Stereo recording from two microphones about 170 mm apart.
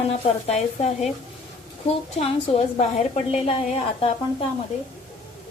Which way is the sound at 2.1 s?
35° left (ahead or behind).